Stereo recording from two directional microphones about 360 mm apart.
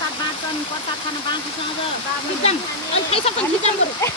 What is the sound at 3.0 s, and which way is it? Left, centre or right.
Speech, centre.